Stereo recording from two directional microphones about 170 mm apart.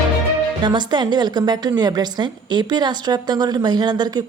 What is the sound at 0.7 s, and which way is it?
A woman's voice, 25° right (ahead or behind).